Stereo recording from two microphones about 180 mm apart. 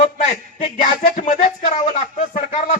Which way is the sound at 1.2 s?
40° left (ahead or behind).